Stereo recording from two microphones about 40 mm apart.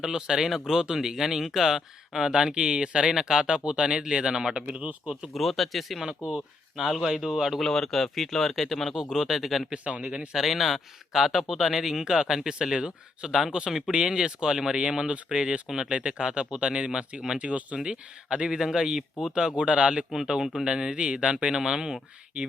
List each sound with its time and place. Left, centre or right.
0.0 s speech: centre; by 4.9 s right
5.3 s speech: centre
6.0 s speech: centre
6.7 s speech: centre
7.6 s speech: centre
9.0 s speech: centre
9.7 s speech: right
10.3 s speech: centre
12.7 s speech: right
13.7 s speech: centre
15.6 s speech: centre
15.9 s speech: right
20.4 s speech: centre
20.7 s speech: centre